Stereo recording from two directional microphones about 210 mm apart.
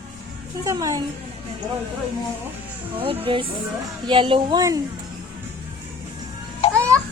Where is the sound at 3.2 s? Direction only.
25° right (ahead or behind).